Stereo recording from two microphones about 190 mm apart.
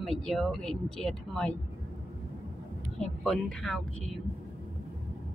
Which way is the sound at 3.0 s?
Centre (ahead or behind).